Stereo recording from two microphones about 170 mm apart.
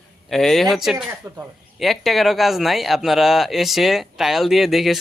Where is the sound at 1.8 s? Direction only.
Centre (ahead or behind).